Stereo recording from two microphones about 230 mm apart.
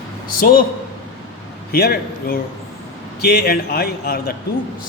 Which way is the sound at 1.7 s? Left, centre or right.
Left.